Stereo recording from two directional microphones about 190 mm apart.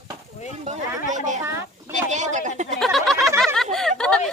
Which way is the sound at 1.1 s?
40° right (ahead or behind).